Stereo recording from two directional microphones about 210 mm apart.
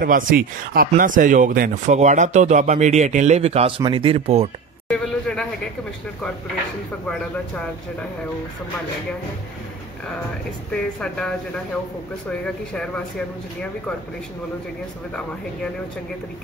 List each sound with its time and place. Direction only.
0.0 s speech: 40° right (ahead or behind)
4.8 s a sound: 5° left (ahead or behind)
10.7 s speech: 5° left (ahead or behind)